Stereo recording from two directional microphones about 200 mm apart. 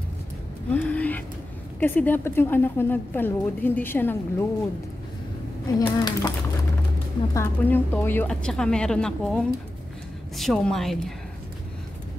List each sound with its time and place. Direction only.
0.7 s a sound: 5° left (ahead or behind)
1.8 s a woman's voice: 10° left (ahead or behind)
5.8 s speech: 20° left (ahead or behind)
7.3 s a woman's voice: 10° left (ahead or behind)